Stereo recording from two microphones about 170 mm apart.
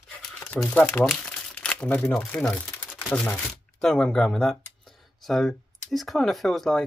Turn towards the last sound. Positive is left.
turn(degrees=0)  # may be behind; listen again after turning